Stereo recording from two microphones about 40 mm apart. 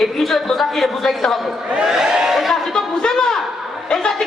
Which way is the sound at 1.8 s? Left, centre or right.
Centre.